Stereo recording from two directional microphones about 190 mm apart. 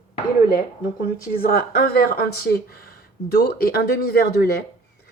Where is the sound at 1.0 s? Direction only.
50° left (ahead or behind).